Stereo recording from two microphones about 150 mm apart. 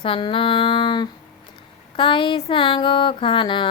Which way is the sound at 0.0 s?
35° left (ahead or behind).